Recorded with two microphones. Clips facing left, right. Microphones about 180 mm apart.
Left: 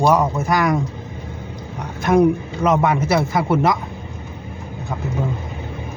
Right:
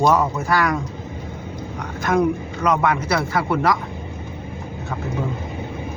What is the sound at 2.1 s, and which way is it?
Speech, 25° left (ahead or behind).